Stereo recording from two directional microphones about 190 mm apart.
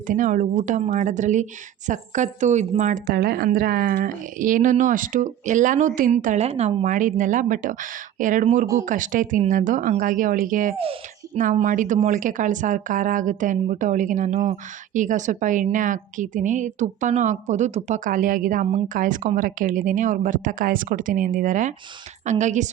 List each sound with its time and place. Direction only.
0.1 s a woman's voice: 40° right (ahead or behind)